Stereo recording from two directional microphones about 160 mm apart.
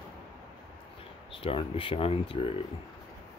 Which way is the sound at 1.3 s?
35° left (ahead or behind).